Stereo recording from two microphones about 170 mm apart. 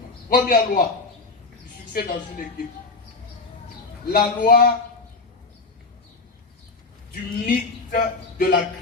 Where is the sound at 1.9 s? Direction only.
55° left (ahead or behind).